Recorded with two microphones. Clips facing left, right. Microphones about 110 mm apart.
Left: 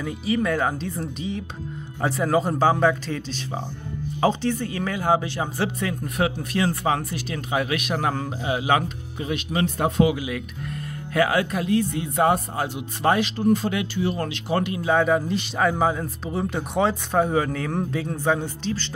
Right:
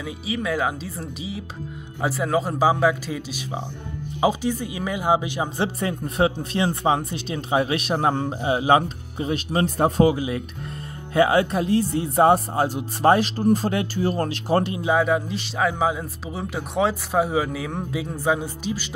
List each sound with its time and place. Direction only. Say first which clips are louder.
0.0 s a man's voice: left 4 dB; centre (ahead or behind)
5.8 s speech: right 3 dB; 30° right (ahead or behind)
14.9 s a man's voice: left 2 dB; 5° right (ahead or behind)